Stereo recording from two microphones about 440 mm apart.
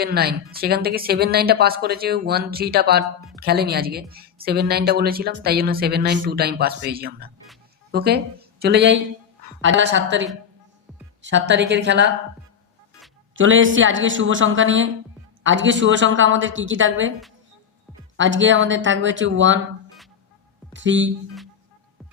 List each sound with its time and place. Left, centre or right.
0.0 s a woman's voice: right
13.3 s a woman's voice: right
18.2 s a woman's voice: right
20.7 s a woman's voice: right